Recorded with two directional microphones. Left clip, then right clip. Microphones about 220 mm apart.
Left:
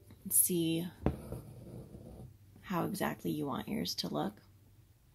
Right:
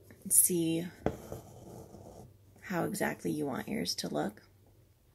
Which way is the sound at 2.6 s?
Centre (ahead or behind).